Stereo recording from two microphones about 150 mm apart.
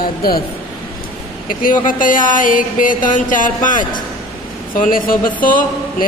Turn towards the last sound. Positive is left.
turn(degrees=70)  # may be behind; listen again after turning